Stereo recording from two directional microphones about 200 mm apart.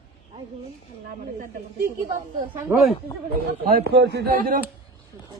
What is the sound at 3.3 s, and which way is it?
Speech, 55° right (ahead or behind).